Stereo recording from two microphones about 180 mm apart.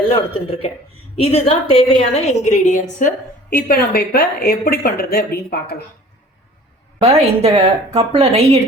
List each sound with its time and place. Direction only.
0.4 s a woman's voice: 35° left (ahead or behind); by 5.8 s 60° left (ahead or behind)
7.0 s a woman's voice: 35° right (ahead or behind)